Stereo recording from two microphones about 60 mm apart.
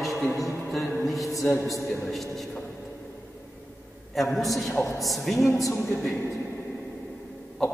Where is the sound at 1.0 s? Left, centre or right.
Centre.